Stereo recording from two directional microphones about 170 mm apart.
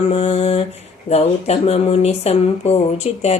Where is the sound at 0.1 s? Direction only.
35° left (ahead or behind).